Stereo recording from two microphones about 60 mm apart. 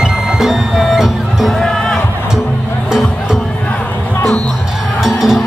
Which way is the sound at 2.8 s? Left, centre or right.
Centre.